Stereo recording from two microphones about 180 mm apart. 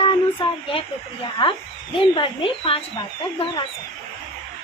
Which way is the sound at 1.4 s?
30° left (ahead or behind).